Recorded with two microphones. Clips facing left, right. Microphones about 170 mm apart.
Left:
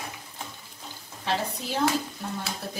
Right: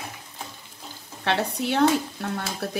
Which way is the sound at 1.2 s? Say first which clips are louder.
Right 4 dB; 70° right (ahead or behind).